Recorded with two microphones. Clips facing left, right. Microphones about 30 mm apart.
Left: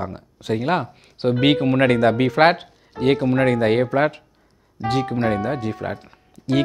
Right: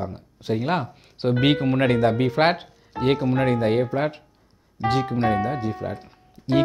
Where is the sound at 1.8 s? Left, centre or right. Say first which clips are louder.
Left 3 dB; left.